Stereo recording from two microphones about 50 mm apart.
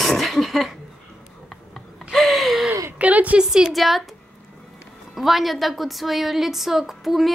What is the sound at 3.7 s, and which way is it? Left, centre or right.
Speech, centre.